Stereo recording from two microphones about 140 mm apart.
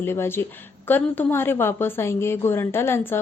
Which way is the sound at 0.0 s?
15° left (ahead or behind).